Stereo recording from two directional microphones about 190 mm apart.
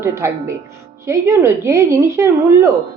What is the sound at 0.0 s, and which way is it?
Speech, 15° right (ahead or behind).